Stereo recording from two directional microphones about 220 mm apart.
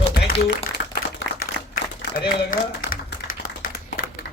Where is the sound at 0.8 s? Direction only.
45° left (ahead or behind).